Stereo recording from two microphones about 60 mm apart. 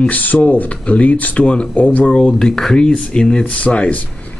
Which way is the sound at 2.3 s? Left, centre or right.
Centre.